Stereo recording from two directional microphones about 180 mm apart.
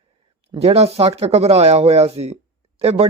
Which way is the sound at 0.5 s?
35° right (ahead or behind).